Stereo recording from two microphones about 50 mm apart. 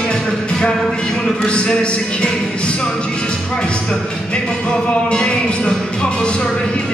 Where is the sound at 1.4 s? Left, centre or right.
Left.